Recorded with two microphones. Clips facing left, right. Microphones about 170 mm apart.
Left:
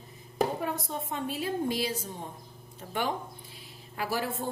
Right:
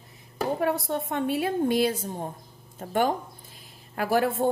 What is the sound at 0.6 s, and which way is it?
A woman's voice, 70° right (ahead or behind).